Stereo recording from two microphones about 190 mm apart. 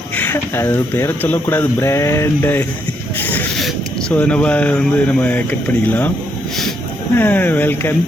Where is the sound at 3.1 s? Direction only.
10° left (ahead or behind).